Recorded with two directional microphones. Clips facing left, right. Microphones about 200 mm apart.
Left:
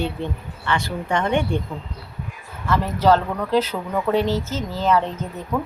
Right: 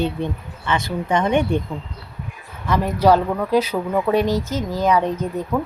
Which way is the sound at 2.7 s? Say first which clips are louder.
Right 2 dB; 15° right (ahead or behind).